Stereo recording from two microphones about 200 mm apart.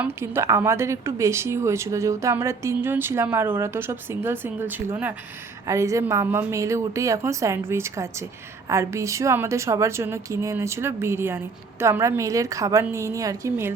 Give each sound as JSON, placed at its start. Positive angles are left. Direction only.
{"t": 0.0, "sound": "a woman's voice", "side_deg": -10}